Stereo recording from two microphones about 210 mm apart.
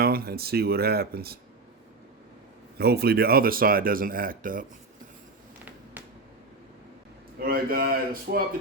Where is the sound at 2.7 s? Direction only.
50° right (ahead or behind).